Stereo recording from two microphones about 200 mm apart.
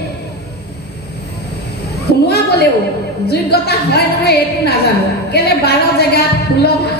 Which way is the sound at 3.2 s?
55° left (ahead or behind).